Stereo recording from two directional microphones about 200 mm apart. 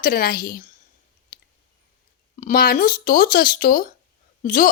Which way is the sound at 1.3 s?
45° left (ahead or behind).